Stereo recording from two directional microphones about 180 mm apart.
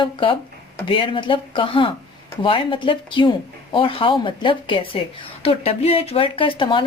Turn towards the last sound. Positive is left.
turn(degrees=30)  # may be behind; listen again after turning